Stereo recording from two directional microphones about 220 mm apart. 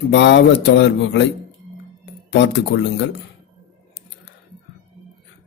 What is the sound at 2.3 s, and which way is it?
Speech, 50° left (ahead or behind).